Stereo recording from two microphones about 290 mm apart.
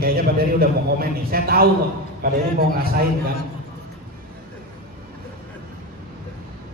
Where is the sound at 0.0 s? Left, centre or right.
Right.